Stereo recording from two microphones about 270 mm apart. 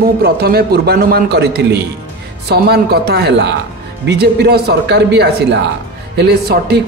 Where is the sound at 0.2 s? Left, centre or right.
Right.